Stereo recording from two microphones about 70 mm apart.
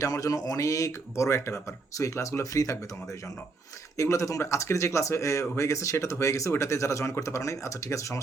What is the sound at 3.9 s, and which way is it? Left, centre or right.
Speech, left.